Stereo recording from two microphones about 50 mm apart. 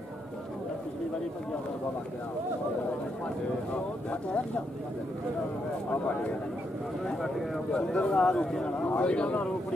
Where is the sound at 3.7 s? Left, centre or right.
Left.